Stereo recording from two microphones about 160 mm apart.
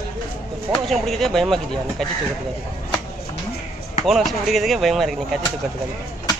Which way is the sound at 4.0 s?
Centre (ahead or behind).